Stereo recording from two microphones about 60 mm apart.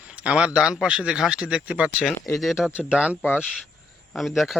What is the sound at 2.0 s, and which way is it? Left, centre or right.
Speech, centre.